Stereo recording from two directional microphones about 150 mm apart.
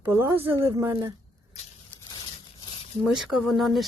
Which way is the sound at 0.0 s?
15° right (ahead or behind).